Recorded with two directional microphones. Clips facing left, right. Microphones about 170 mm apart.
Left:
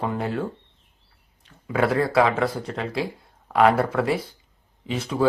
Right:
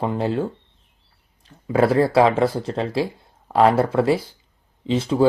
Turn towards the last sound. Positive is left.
turn(degrees=-30)  # may be behind; listen again after turning